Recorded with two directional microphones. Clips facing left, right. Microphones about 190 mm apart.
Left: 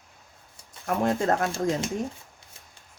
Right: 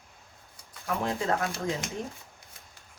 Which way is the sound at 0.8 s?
50° left (ahead or behind).